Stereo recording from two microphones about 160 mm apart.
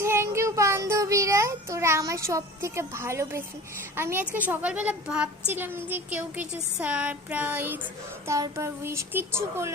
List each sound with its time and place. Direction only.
0.0 s child singing: 15° right (ahead or behind)
3.9 s speech: 15° right (ahead or behind)